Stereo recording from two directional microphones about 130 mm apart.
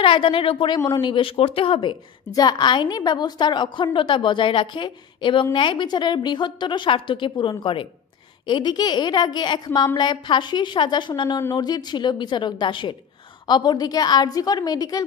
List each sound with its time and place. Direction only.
0.0 s a woman's voice: 40° left (ahead or behind)